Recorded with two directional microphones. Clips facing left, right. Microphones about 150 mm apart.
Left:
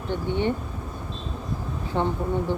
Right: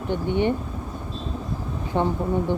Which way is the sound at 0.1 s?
15° right (ahead or behind).